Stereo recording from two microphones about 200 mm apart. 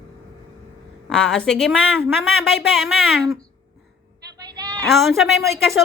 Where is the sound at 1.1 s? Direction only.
Centre (ahead or behind).